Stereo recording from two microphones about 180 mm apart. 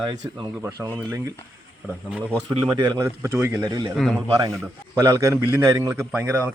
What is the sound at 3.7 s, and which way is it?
Speech, 25° right (ahead or behind).